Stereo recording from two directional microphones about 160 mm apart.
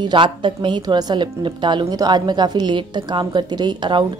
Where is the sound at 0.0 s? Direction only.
30° right (ahead or behind).